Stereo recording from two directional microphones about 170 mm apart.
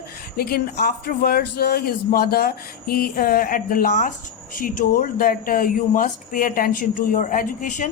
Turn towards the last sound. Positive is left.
turn(degrees=50)  # may be behind; listen again after turning